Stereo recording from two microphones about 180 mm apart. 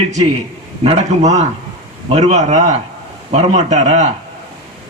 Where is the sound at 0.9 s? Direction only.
40° right (ahead or behind).